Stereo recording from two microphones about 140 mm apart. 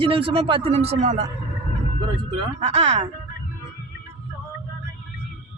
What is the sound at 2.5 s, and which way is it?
Speech, 45° right (ahead or behind).